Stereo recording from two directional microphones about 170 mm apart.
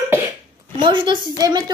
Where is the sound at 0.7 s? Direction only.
30° right (ahead or behind).